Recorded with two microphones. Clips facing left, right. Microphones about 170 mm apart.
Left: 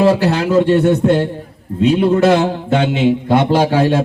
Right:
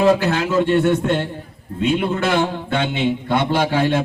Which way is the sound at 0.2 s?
35° left (ahead or behind).